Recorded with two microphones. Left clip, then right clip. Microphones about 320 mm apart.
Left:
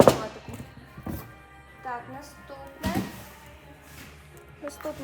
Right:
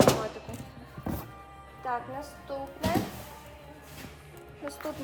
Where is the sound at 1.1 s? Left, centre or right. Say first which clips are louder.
Right 2 dB; centre.